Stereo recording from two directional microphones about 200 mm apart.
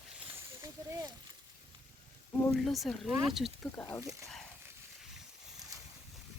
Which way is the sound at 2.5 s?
Centre (ahead or behind).